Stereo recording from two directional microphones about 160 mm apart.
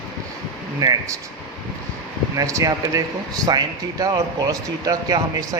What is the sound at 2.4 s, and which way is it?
Speech, 20° right (ahead or behind).